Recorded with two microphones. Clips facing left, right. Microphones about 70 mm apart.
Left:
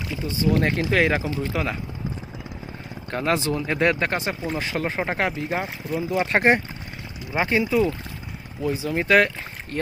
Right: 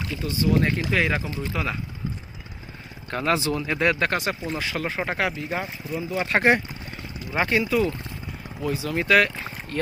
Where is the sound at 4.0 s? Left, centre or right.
Left.